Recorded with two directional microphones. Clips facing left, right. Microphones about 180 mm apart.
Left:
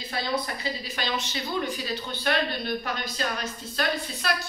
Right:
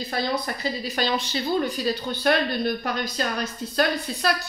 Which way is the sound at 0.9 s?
35° right (ahead or behind).